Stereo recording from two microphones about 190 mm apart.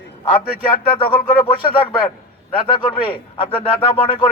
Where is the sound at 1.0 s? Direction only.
25° left (ahead or behind).